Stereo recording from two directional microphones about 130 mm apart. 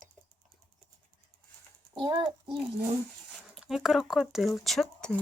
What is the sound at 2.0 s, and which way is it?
Speech, 35° right (ahead or behind).